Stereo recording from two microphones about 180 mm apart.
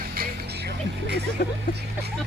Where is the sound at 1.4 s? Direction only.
55° left (ahead or behind).